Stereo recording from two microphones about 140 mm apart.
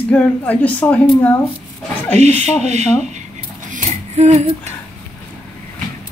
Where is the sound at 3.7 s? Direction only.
50° right (ahead or behind).